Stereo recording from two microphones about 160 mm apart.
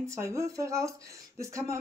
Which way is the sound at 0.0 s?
20° right (ahead or behind).